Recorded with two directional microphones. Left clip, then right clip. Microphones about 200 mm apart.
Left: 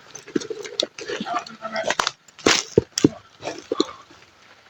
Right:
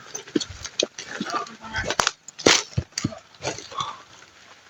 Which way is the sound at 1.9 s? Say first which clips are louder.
Even; 15° right (ahead or behind).